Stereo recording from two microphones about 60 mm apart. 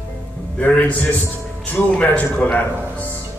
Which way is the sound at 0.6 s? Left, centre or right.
Left.